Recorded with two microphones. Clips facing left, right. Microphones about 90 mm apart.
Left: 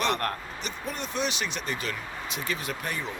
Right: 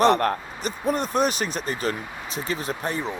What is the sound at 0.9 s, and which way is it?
Speech, 45° right (ahead or behind).